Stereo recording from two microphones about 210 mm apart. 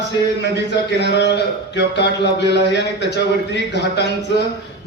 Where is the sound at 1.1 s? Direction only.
55° left (ahead or behind).